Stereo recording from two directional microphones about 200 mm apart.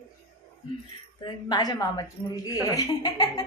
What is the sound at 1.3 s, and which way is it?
A woman's voice, 20° left (ahead or behind).